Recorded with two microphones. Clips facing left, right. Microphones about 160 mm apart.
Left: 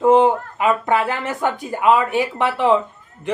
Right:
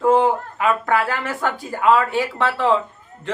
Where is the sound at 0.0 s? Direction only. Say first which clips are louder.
Left 3 dB; 20° left (ahead or behind).